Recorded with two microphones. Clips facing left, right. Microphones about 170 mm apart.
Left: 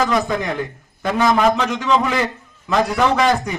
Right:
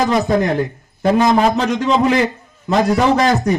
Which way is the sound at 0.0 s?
35° right (ahead or behind).